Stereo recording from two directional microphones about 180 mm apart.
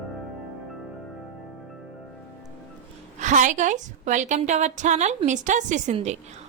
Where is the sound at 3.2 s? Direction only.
45° right (ahead or behind).